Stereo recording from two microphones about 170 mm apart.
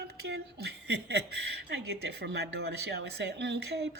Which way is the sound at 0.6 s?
75° right (ahead or behind).